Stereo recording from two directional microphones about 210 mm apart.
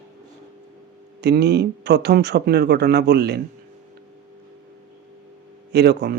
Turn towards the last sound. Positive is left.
turn(degrees=-50)  # may be behind; listen again after turning